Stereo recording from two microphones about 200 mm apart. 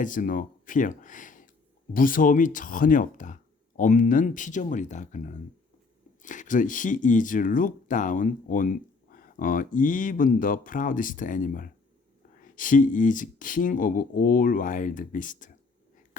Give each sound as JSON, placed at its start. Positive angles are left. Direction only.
{"t": 0.0, "sound": "speech", "side_deg": 40}